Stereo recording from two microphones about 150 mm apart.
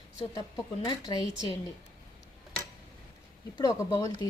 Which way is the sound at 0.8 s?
25° left (ahead or behind).